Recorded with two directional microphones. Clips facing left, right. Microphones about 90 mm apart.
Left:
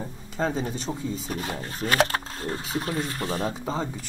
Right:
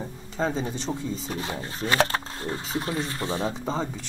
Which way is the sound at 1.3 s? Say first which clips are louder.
Even; 25° right (ahead or behind).